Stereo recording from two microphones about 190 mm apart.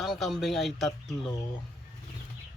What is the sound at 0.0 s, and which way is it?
Speech, centre (ahead or behind).